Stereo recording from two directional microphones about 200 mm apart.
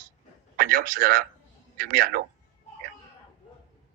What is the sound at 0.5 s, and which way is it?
A man's voice, 45° right (ahead or behind).